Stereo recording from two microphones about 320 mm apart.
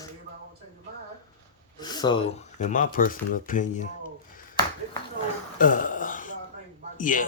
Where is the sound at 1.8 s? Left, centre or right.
Centre.